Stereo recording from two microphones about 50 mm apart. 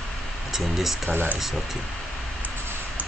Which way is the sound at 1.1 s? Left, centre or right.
Right.